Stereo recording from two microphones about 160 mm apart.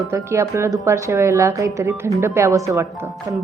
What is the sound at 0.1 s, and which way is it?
A woman's voice, 15° right (ahead or behind).